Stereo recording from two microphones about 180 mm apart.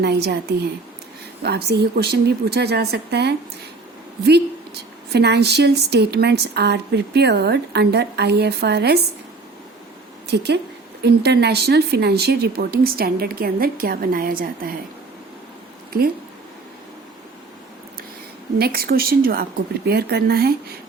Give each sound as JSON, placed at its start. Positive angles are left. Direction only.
{"t": 0.0, "sound": "a woman's voice", "side_deg": -65}
{"t": 1.4, "sound": "a woman's voice", "side_deg": -65}
{"t": 10.2, "sound": "a woman's voice", "side_deg": -65}
{"t": 18.6, "sound": "a woman's voice", "side_deg": -55}